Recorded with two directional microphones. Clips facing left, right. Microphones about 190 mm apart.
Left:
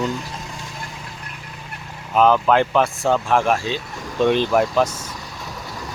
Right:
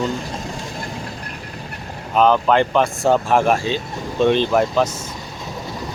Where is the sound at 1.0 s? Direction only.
40° right (ahead or behind).